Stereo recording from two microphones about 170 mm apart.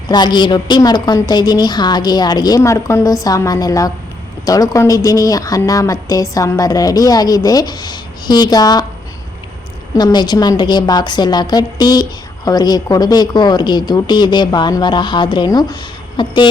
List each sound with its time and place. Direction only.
0.1 s speech: 25° left (ahead or behind)
9.9 s speech: 25° left (ahead or behind)